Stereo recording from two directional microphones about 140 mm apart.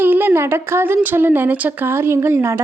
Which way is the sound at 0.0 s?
15° right (ahead or behind).